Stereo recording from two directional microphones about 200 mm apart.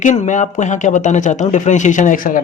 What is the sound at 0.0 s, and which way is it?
A man's voice, 35° left (ahead or behind).